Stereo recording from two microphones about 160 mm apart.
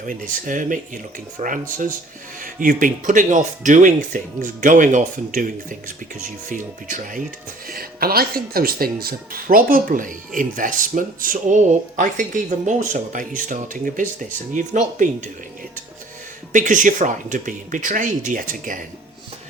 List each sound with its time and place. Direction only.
0.0 s speech: 55° right (ahead or behind)
2.4 s speech: 55° right (ahead or behind)
7.7 s speech: 70° right (ahead or behind); by 15.3 s 50° right (ahead or behind)
16.5 s speech: 50° right (ahead or behind)